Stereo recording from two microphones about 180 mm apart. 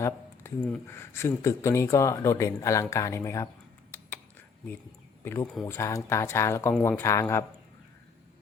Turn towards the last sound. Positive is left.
turn(degrees=15)  # may be behind; listen again after turning